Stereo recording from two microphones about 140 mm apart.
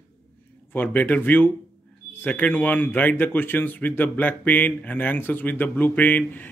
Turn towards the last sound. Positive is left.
turn(degrees=10)  # may be behind; listen again after turning